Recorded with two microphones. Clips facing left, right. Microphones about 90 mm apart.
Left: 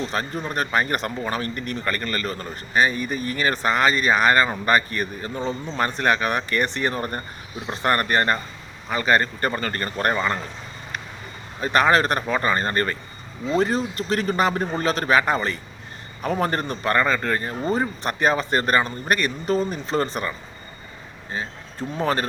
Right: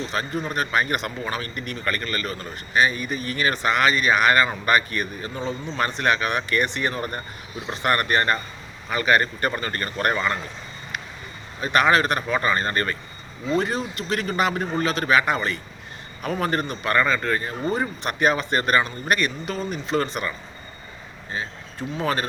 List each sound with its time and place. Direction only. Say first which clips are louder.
0.4 s a man's voice: left 1 dB; 35° left (ahead or behind)
11.6 s a man's voice: left 1 dB; 35° left (ahead or behind)
21.3 s speech: left 1 dB; 35° left (ahead or behind)